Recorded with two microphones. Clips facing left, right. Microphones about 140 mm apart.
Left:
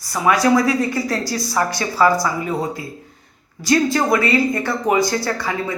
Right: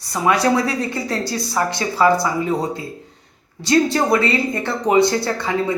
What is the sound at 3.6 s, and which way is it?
A woman's voice, 30° right (ahead or behind).